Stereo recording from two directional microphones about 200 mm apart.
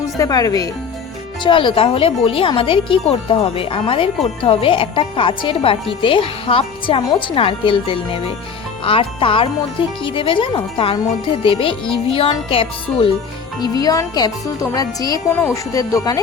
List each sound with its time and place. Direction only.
0.0 s a woman's voice: 20° left (ahead or behind)